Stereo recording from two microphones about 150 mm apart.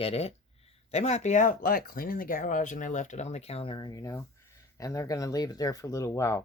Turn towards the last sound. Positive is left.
turn(degrees=20)  # may be behind; listen again after turning